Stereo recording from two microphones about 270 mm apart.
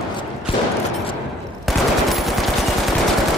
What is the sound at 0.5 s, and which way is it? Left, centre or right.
Fusillade, centre.